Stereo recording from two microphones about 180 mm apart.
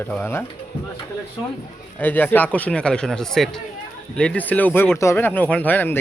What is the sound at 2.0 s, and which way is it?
Speech, 10° left (ahead or behind).